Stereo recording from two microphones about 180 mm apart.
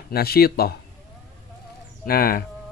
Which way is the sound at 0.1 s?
60° left (ahead or behind).